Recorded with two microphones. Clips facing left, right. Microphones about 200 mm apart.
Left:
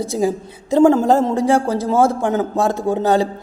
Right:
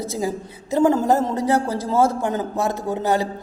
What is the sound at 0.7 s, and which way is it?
A man's voice, 25° left (ahead or behind).